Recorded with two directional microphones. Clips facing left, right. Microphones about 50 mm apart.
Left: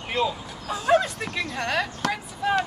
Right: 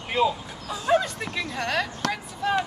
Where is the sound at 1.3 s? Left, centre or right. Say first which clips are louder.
Even; centre.